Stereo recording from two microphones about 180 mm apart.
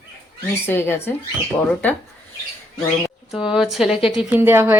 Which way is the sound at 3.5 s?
Centre (ahead or behind).